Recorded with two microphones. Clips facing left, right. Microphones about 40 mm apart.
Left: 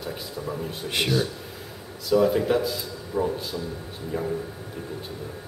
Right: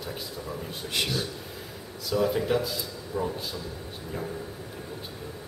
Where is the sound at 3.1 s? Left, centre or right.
Left.